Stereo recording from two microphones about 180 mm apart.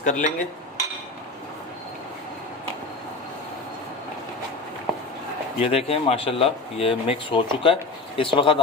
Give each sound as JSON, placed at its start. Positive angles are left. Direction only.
{"t": 0.0, "sound": "dishes", "side_deg": 45}
{"t": 5.5, "sound": "speech", "side_deg": 35}